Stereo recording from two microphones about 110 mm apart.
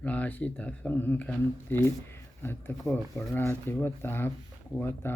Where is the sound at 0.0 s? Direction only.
15° left (ahead or behind).